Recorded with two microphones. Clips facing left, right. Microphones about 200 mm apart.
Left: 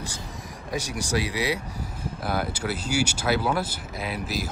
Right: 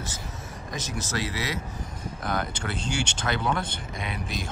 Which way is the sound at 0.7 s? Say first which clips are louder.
Left 5 dB; 10° left (ahead or behind).